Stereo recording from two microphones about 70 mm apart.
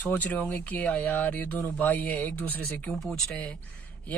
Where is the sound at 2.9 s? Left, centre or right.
Centre.